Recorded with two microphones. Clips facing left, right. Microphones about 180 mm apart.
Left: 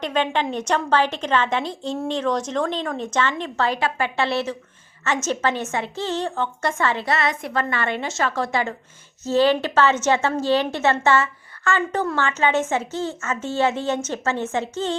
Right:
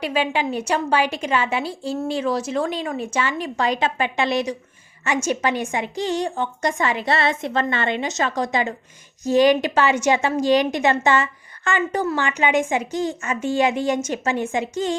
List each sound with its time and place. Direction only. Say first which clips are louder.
0.0 s a woman's voice: even; 10° right (ahead or behind)
7.1 s a woman's voice: right 2 dB; 30° right (ahead or behind); by 14.9 s 15° right (ahead or behind)